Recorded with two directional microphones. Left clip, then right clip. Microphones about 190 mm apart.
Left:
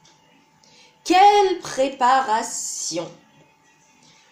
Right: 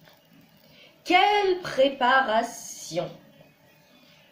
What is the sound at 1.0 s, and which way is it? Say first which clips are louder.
A woman's voice: left 6 dB; 35° left (ahead or behind).